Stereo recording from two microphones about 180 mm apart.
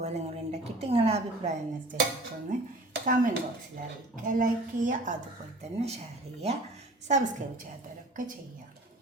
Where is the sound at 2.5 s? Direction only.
50° right (ahead or behind).